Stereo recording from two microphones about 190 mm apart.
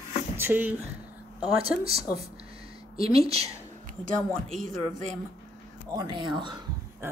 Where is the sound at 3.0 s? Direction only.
30° right (ahead or behind).